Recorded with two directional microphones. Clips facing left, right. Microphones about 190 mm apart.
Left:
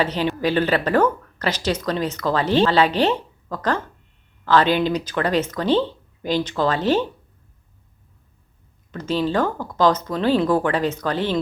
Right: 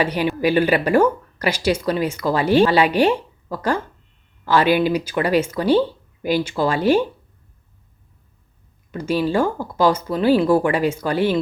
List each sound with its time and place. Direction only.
0.0 s speech: 10° right (ahead or behind)
8.9 s speech: 10° right (ahead or behind)